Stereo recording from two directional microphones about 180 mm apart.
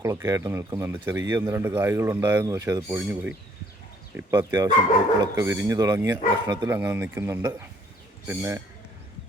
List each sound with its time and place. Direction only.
0.0 s speech: 15° right (ahead or behind)